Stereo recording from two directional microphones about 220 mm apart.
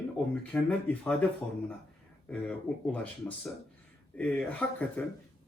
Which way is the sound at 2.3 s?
5° left (ahead or behind).